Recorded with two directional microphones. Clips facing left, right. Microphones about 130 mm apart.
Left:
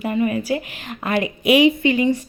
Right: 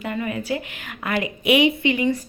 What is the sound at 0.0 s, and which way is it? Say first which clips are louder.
A woman's voice: left 6 dB; 20° left (ahead or behind).